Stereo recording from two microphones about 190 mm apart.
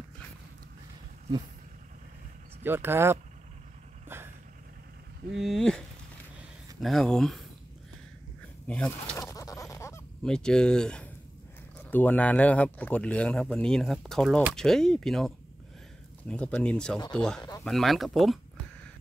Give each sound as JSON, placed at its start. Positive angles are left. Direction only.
{"t": 2.6, "sound": "speech", "side_deg": -10}
{"t": 4.1, "sound": "vehicle", "side_deg": -10}
{"t": 5.4, "sound": "speech", "side_deg": 0}
{"t": 8.6, "sound": "speech", "side_deg": 5}
{"t": 9.2, "sound": "a sound", "side_deg": 15}
{"t": 10.2, "sound": "speech", "side_deg": 5}
{"t": 17.4, "sound": "speech", "side_deg": 20}
{"t": 17.6, "sound": "speech", "side_deg": 0}